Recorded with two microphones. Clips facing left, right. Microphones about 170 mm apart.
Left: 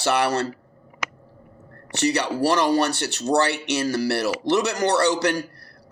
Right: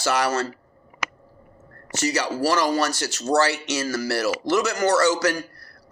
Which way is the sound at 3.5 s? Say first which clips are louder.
Left 3 dB; 60° left (ahead or behind).